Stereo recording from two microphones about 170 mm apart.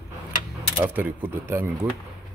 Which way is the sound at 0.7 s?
10° right (ahead or behind).